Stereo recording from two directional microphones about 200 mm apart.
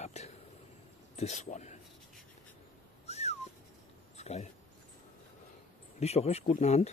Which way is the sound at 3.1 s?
35° left (ahead or behind).